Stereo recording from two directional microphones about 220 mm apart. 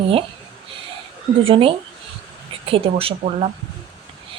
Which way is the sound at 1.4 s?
25° right (ahead or behind).